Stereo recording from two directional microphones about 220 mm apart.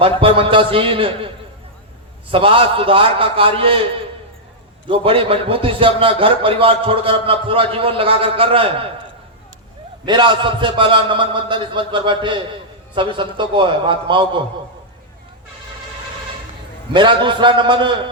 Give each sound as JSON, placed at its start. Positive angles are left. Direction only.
{"t": 0.0, "sound": "a man's voice", "side_deg": -25}
{"t": 2.3, "sound": "a man's voice", "side_deg": -25}
{"t": 10.1, "sound": "a man's voice", "side_deg": -20}
{"t": 16.9, "sound": "a man's voice", "side_deg": -20}